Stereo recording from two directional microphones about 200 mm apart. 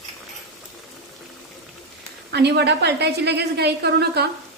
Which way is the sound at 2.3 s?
55° right (ahead or behind).